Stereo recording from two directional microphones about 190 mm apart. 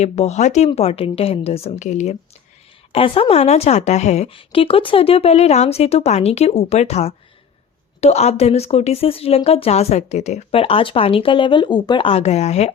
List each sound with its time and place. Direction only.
0.0 s speech: 35° left (ahead or behind)